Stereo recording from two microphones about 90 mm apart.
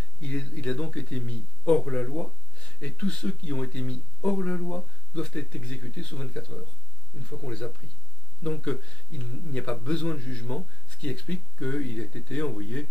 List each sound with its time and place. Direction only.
0.2 s speech: 15° left (ahead or behind)